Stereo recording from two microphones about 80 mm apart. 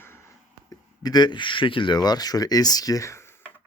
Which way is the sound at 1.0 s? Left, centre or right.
Left.